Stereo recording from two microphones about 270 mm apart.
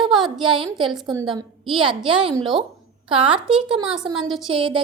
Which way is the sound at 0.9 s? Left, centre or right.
Centre.